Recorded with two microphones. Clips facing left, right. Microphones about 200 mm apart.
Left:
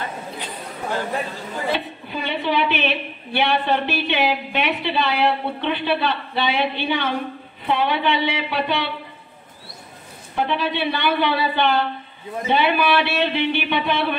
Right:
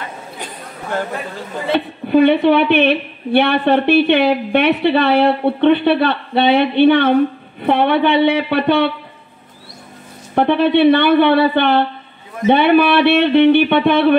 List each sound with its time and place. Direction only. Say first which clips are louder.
1.7 s a woman's voice: right 13 dB; 60° right (ahead or behind)
10.3 s a woman's voice: right 10 dB; 60° right (ahead or behind)